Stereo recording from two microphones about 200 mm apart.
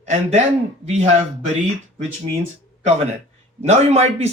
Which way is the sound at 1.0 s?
35° right (ahead or behind).